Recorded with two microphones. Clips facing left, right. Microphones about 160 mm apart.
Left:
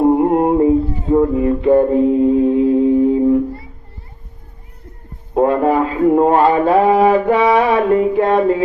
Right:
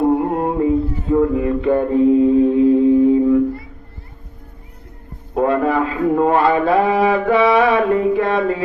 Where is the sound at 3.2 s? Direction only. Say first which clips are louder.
Even; 30° left (ahead or behind).